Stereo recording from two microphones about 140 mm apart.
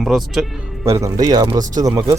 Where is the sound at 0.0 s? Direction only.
Centre (ahead or behind).